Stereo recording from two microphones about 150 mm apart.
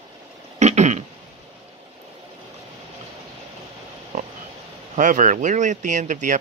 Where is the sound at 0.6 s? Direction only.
50° right (ahead or behind).